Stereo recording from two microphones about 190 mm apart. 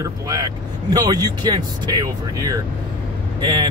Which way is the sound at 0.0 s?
20° right (ahead or behind).